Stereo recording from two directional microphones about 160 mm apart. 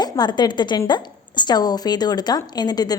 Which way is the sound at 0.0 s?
25° left (ahead or behind).